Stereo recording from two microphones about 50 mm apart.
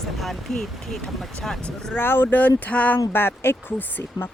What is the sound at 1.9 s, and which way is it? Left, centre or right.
Speech, left.